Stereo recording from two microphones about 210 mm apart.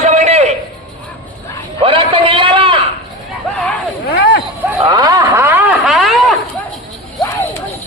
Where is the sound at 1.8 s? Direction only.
25° right (ahead or behind).